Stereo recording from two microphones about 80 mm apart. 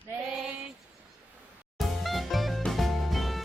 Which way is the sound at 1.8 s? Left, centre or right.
Centre.